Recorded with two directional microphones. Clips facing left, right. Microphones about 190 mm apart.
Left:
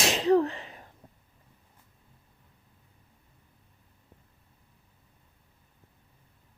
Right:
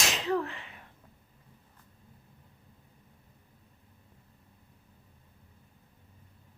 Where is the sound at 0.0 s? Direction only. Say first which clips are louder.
Left 8 dB; 35° left (ahead or behind).